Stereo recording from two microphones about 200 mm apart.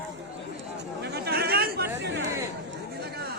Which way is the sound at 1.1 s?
50° right (ahead or behind).